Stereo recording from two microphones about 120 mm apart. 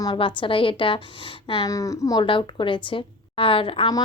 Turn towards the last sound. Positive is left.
turn(degrees=50)  # may be behind; listen again after turning